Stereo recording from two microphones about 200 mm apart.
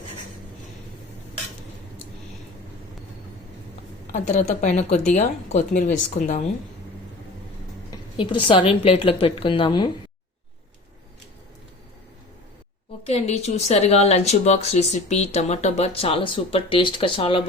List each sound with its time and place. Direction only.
4.0 s a woman's voice: 35° left (ahead or behind)
8.1 s a woman's voice: 25° left (ahead or behind)
13.1 s a woman's voice: 35° left (ahead or behind)